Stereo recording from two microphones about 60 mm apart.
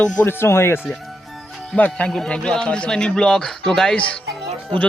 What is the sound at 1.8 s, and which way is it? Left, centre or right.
A man's voice, left.